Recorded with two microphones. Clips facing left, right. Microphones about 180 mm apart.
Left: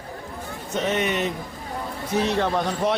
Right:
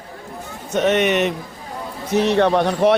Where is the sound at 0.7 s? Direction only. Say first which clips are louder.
Right 7 dB; 70° right (ahead or behind).